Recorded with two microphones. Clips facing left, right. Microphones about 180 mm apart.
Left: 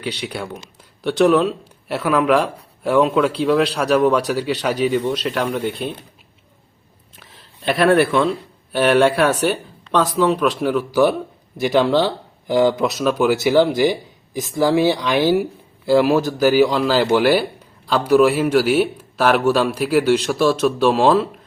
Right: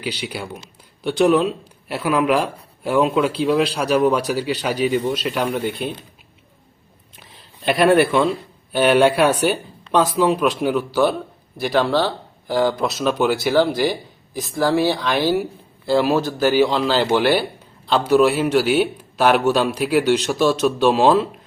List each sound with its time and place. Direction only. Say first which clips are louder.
0.0 s speech: left 1 dB; 5° right (ahead or behind)
7.6 s speech: even; centre (ahead or behind)
11.6 s speech: left 2 dB; 15° left (ahead or behind)
13.1 s speech: left 2 dB; 5° left (ahead or behind)